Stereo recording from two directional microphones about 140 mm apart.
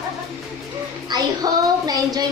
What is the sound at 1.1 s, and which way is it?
Child singing, 30° right (ahead or behind).